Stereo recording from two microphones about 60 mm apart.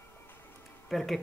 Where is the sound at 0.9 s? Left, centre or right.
Centre.